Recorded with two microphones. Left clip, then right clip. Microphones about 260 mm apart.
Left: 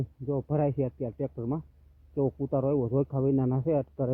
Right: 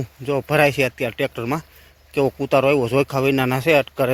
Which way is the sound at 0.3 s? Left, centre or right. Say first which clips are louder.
Right 12 dB; right.